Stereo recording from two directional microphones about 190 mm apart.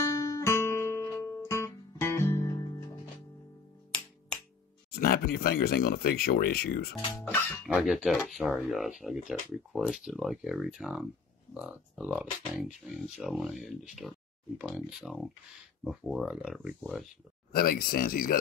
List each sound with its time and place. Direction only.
0.2 s guitar: 15° left (ahead or behind)
4.9 s speech: 50° left (ahead or behind)
7.2 s speech: 5° left (ahead or behind)
17.5 s speech: 50° left (ahead or behind)